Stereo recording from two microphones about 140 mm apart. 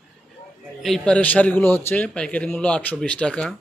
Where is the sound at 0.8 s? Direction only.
5° left (ahead or behind).